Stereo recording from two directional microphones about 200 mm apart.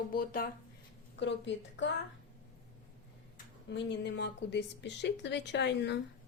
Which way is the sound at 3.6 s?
60° left (ahead or behind).